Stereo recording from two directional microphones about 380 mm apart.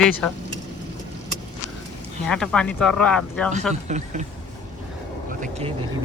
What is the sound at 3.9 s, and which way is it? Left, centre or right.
Speech, centre.